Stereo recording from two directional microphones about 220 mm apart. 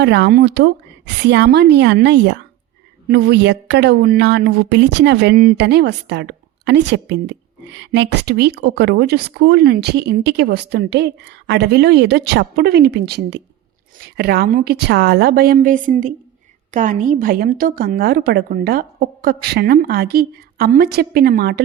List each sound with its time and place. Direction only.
0.0 s a woman's voice: 50° right (ahead or behind)